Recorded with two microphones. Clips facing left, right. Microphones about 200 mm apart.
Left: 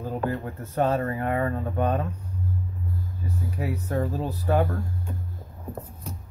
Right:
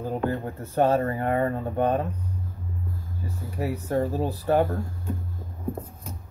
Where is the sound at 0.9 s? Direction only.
35° right (ahead or behind).